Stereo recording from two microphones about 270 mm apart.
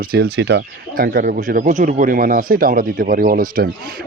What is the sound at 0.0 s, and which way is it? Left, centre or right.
Speech, right.